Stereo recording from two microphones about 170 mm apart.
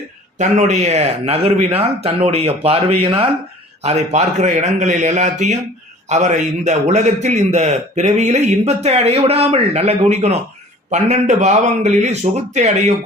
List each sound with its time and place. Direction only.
0.3 s a man's voice: 45° right (ahead or behind)